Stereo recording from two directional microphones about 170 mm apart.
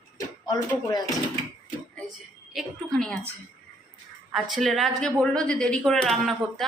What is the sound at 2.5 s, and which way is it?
Speech, 5° left (ahead or behind).